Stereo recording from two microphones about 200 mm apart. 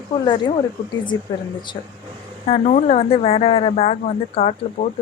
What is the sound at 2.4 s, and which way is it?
Speech, 35° left (ahead or behind).